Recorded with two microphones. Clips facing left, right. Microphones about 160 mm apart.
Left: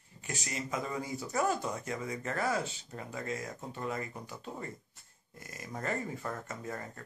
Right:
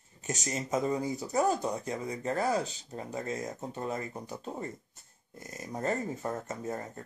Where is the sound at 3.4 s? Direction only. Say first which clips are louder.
Right 3 dB; 20° right (ahead or behind).